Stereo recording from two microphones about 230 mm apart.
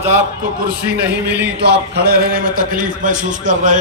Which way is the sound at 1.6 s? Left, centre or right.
Right.